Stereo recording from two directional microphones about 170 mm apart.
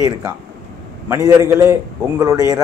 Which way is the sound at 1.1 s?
20° right (ahead or behind).